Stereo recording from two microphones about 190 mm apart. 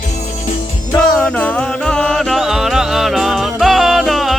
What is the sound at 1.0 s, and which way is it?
Music, 5° left (ahead or behind).